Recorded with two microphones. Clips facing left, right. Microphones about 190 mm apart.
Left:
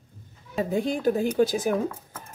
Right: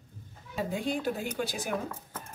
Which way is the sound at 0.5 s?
45° left (ahead or behind).